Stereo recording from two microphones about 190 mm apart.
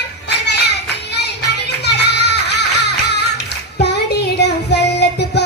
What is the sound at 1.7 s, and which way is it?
Music, 60° left (ahead or behind).